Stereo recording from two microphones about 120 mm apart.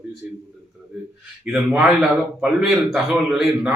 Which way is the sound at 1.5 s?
5° right (ahead or behind).